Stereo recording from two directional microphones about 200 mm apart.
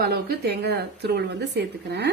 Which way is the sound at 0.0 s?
55° right (ahead or behind).